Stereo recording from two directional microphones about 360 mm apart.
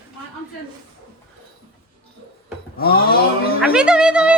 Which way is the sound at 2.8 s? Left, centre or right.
Left.